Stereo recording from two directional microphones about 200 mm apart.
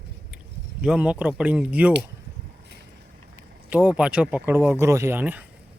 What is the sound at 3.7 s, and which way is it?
Speech, 5° right (ahead or behind).